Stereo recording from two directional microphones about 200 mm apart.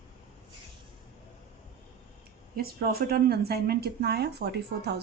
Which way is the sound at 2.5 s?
50° right (ahead or behind).